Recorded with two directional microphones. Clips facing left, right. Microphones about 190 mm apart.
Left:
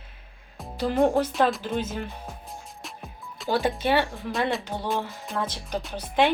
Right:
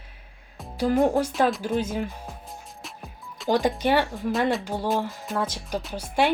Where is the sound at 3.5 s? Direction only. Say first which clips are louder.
Right 2 dB; 15° right (ahead or behind).